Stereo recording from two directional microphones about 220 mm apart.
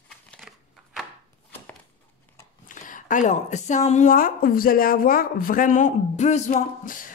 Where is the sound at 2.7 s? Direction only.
35° left (ahead or behind).